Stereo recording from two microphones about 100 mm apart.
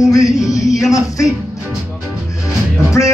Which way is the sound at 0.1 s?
35° left (ahead or behind).